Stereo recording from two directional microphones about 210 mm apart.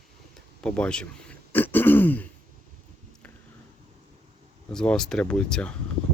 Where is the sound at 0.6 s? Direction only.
5° left (ahead or behind).